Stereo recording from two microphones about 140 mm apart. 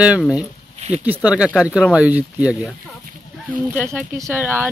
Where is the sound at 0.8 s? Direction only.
50° right (ahead or behind).